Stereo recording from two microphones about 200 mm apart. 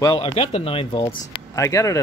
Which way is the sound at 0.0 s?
25° left (ahead or behind).